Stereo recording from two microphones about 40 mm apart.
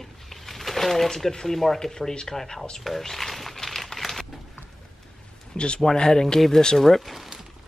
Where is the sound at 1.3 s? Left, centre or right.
Centre.